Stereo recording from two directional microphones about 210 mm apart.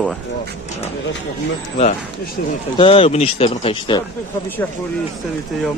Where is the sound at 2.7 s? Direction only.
25° left (ahead or behind).